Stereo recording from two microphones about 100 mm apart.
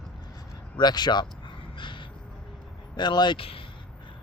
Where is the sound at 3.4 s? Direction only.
65° left (ahead or behind).